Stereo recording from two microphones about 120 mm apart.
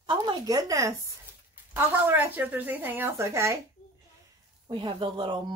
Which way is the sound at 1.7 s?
15° right (ahead or behind).